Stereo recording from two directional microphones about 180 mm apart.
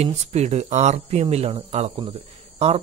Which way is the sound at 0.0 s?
35° right (ahead or behind).